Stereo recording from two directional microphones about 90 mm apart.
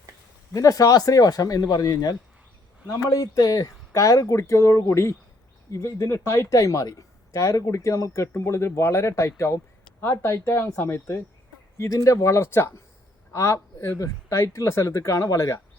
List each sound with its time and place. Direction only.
0.5 s speech: 40° left (ahead or behind)